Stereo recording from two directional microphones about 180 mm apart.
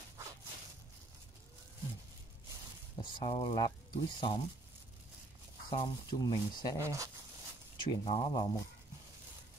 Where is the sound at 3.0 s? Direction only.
30° left (ahead or behind).